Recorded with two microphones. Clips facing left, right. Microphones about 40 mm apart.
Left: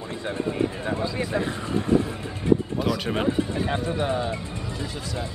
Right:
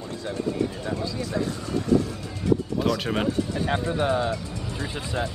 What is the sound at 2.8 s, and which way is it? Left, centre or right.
Speech, centre.